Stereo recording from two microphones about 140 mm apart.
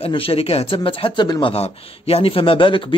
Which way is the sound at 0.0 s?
40° left (ahead or behind).